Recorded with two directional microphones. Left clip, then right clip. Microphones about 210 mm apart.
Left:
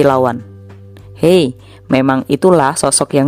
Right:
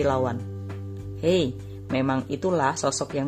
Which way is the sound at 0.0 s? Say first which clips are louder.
Left 13 dB; 55° left (ahead or behind).